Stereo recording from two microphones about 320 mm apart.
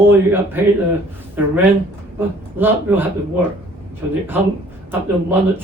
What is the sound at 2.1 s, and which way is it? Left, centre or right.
Speech, centre.